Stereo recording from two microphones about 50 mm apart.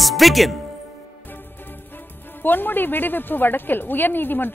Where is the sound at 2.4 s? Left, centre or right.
Left.